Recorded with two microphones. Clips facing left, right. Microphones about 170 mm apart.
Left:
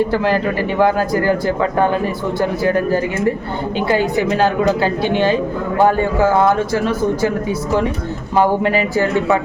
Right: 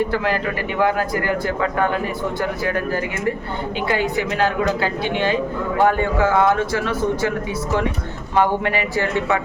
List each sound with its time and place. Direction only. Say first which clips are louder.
0.8 s a woman's voice: left 4 dB; 35° left (ahead or behind)
2.4 s a woman's voice: left 8 dB; 30° left (ahead or behind)
8.4 s a woman's voice: left 4 dB; 35° left (ahead or behind)